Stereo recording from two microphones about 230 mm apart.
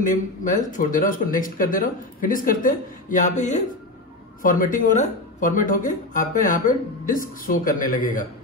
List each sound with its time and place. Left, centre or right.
0.0 s speech: left